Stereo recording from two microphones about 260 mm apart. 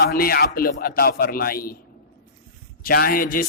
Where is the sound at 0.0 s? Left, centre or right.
Left.